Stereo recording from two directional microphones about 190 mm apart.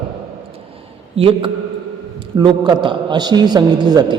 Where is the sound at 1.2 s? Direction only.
30° right (ahead or behind).